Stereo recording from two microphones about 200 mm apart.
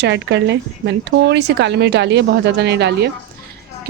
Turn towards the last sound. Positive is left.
turn(degrees=-55)  # may be behind; listen again after turning